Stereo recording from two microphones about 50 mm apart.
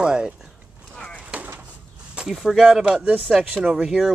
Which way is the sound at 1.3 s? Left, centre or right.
Right.